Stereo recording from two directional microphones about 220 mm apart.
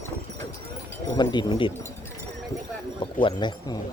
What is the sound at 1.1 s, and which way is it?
Speech, 20° left (ahead or behind).